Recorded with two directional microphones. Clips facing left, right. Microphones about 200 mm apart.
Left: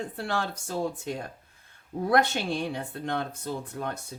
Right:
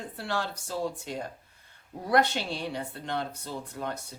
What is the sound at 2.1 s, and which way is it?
Speech, 50° left (ahead or behind).